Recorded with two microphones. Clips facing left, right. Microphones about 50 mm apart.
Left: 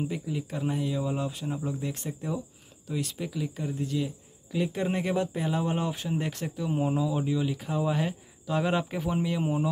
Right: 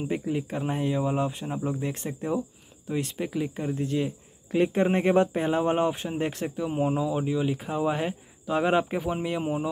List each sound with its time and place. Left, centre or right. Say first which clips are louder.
0.1 s speech: right 5 dB; right; by 9.7 s centre